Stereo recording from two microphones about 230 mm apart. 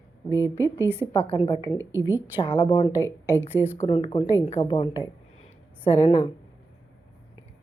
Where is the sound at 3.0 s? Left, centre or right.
Centre.